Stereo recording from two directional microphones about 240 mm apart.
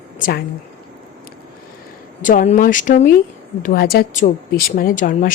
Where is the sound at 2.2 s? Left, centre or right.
Left.